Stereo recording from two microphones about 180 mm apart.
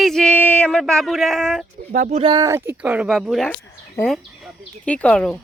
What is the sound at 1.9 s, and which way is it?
Speech, 40° right (ahead or behind).